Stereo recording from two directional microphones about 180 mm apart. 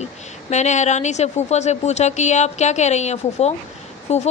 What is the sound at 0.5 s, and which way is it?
A woman's voice, 40° left (ahead or behind).